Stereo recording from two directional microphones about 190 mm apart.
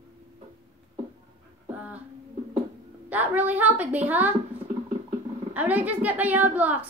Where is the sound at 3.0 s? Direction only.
10° right (ahead or behind).